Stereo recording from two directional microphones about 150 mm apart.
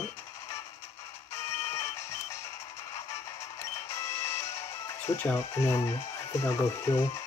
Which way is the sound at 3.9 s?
20° left (ahead or behind).